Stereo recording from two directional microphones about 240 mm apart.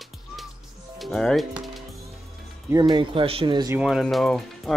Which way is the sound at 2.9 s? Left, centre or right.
Right.